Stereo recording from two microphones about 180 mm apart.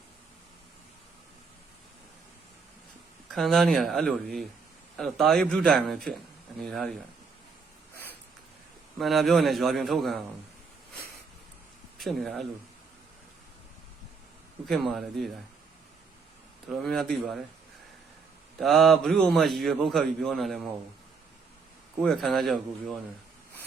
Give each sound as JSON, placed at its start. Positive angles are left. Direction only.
{"t": 3.3, "sound": "a man's voice", "side_deg": 0}
{"t": 9.0, "sound": "a man's voice", "side_deg": 0}
{"t": 11.9, "sound": "a man's voice", "side_deg": 0}
{"t": 14.7, "sound": "a man's voice", "side_deg": 0}
{"t": 16.6, "sound": "a man's voice", "side_deg": 0}
{"t": 18.6, "sound": "a man's voice", "side_deg": 0}
{"t": 22.0, "sound": "a man's voice", "side_deg": 0}